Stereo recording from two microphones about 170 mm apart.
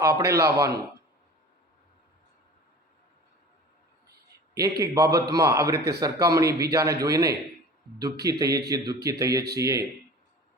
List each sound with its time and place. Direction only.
0.1 s a man's voice: 70° right (ahead or behind)
4.5 s a man's voice: 20° right (ahead or behind)
5.7 s a man's voice: 75° right (ahead or behind)
6.0 s a man's voice: 20° right (ahead or behind)